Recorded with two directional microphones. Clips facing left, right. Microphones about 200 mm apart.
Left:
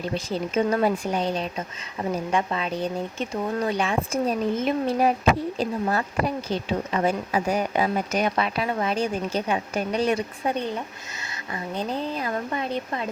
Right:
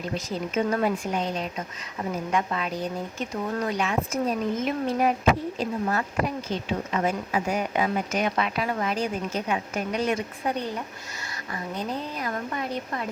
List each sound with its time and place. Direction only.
0.1 s speech: 30° left (ahead or behind)
11.8 s speech: 30° left (ahead or behind)